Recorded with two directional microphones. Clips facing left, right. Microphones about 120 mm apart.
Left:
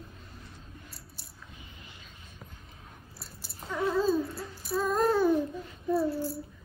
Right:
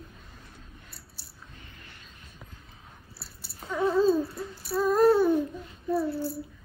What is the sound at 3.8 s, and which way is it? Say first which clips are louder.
Dog: right 4 dB; 20° right (ahead or behind).